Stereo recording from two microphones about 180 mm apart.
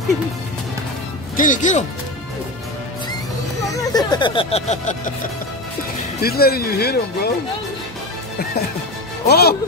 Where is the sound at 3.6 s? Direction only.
20° left (ahead or behind); by 5.1 s 40° left (ahead or behind).